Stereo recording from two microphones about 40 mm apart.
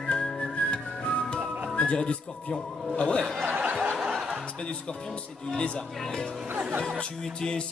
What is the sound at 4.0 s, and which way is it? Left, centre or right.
Music, centre.